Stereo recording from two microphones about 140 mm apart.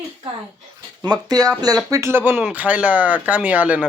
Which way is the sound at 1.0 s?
30° right (ahead or behind).